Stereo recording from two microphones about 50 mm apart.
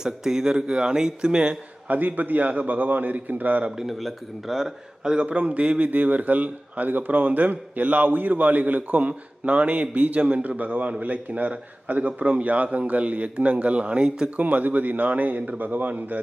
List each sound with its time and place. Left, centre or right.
0.0 s speech: centre
1.9 s a man's voice: right
3.8 s speech: centre
5.2 s a man's voice: right
14.3 s a man's voice: right